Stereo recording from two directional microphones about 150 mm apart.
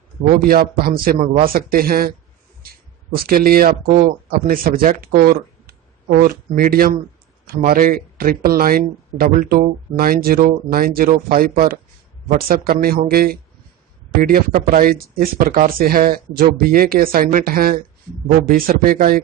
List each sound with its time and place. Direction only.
0.5 s a man's voice: 85° right